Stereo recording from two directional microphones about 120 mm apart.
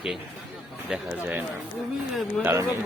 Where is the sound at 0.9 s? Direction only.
15° right (ahead or behind).